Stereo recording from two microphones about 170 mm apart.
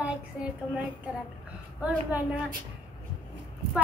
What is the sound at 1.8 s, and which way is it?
Speech, 5° right (ahead or behind).